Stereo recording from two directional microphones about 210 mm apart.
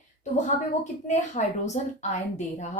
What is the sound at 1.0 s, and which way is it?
Speech, 35° left (ahead or behind).